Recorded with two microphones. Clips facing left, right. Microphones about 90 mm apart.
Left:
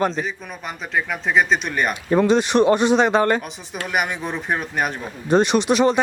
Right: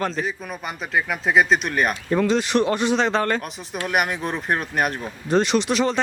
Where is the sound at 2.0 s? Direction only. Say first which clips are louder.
Left 8 dB; 20° left (ahead or behind).